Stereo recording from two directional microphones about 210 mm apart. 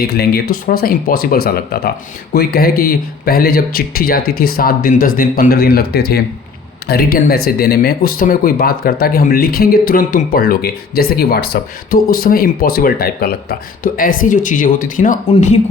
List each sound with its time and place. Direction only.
0.0 s speech: 50° left (ahead or behind)